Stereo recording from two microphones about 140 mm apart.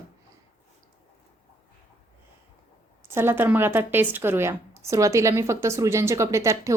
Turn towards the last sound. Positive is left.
turn(degrees=-20)  # may be behind; listen again after turning